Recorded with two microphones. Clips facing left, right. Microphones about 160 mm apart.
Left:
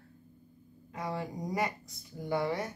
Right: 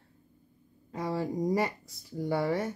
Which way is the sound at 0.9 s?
35° right (ahead or behind).